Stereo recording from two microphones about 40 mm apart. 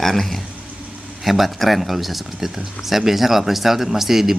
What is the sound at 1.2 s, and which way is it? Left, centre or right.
Speech, centre.